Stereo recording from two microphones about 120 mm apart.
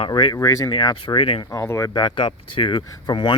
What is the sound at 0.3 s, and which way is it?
Speech, 30° left (ahead or behind).